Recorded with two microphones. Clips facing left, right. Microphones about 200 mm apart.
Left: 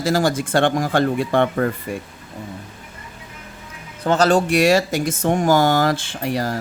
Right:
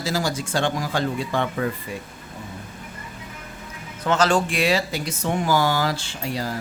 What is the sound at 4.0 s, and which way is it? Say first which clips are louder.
Speech: left 4 dB; 35° left (ahead or behind).